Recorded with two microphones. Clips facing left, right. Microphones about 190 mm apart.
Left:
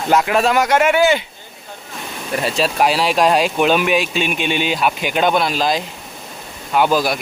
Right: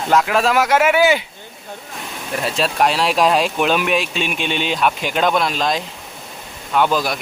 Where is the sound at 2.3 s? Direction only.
Centre (ahead or behind).